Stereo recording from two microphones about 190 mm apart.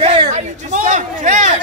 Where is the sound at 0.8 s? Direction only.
40° right (ahead or behind).